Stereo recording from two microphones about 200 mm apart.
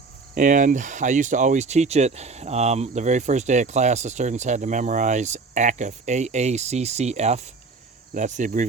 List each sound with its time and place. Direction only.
0.3 s speech: 40° right (ahead or behind)